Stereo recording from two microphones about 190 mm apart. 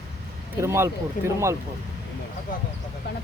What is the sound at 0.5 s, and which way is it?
Speech, 15° right (ahead or behind).